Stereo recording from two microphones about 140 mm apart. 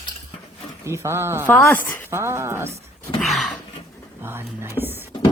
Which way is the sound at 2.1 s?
20° right (ahead or behind).